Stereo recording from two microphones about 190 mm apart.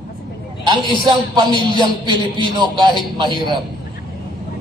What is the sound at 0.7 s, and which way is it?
A man's voice, 25° right (ahead or behind).